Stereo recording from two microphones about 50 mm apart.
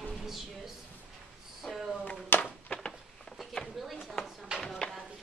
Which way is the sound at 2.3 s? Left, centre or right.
Left.